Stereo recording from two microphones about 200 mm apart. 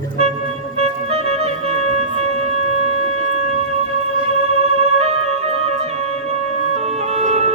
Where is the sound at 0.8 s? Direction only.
30° right (ahead or behind).